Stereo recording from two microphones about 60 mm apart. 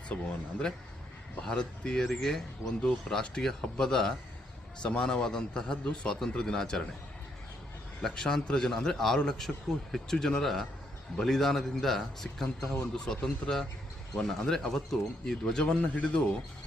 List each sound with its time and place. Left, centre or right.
0.1 s speech: left
1.5 s a man's voice: centre
8.0 s a man's voice: centre